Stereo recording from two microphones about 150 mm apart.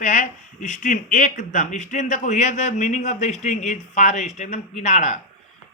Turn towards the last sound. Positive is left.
turn(degrees=50)  # may be behind; listen again after turning